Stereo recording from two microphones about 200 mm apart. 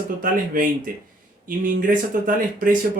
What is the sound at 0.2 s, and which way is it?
Speech, 45° right (ahead or behind).